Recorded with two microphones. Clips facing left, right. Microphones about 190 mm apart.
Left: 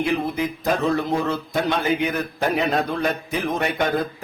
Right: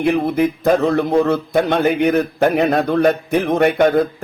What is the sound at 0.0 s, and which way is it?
Speech, 60° right (ahead or behind).